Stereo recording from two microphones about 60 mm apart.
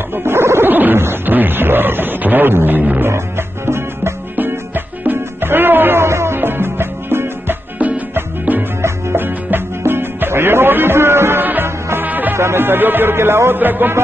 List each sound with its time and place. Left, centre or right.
0.1 s wild animals: right
3.0 s music: right
4.4 s music: right
7.8 s music: right
12.4 s speech: right